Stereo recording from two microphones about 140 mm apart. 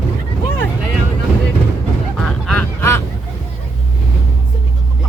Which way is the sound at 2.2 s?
5° left (ahead or behind).